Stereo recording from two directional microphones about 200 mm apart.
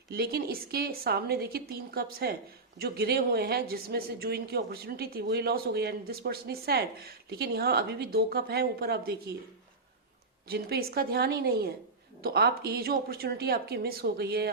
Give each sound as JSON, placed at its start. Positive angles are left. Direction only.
{"t": 0.1, "sound": "speech", "side_deg": -50}
{"t": 10.5, "sound": "speech", "side_deg": -50}